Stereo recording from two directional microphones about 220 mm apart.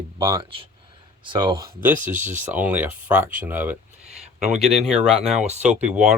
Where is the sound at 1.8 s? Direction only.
10° right (ahead or behind).